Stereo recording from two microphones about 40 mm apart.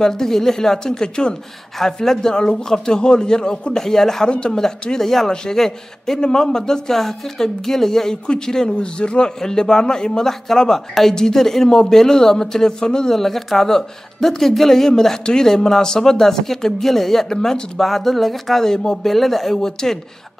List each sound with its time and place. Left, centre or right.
0.0 s speech: centre
3.8 s speech: centre
4.3 s a man's voice: left
4.8 s a man's voice: centre
13.2 s speech: centre